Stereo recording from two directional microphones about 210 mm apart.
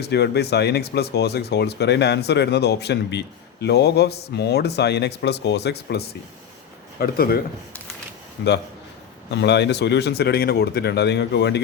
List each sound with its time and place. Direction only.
0.0 s speech: 50° left (ahead or behind)
8.4 s speech: 50° left (ahead or behind)